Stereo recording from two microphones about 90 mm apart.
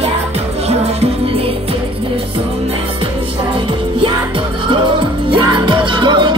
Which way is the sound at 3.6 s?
70° right (ahead or behind).